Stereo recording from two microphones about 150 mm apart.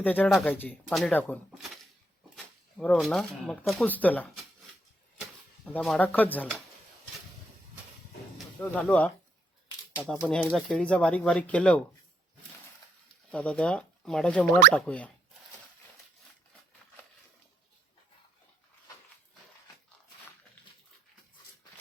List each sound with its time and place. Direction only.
0.0 s speech: 10° left (ahead or behind)
0.3 s speech: centre (ahead or behind)
0.5 s speech: 10° left (ahead or behind)
1.5 s shuffling cards: centre (ahead or behind)
2.3 s speech: 5° left (ahead or behind)
5.7 s speech: 5° left (ahead or behind)
8.6 s speech: 10° left (ahead or behind)
10.2 s speech: 5° left (ahead or behind)
13.3 s speech: 10° left (ahead or behind)